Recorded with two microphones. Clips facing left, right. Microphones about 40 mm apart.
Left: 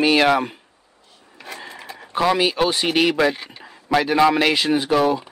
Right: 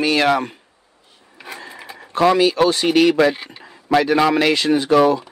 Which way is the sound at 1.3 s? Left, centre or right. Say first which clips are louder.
Right 1 dB; centre.